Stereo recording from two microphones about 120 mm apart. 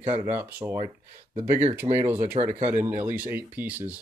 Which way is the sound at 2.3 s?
75° right (ahead or behind).